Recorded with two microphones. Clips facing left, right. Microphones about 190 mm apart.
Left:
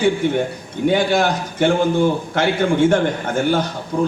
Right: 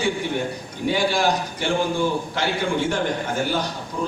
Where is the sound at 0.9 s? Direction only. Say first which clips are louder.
Left 3 dB; 55° left (ahead or behind).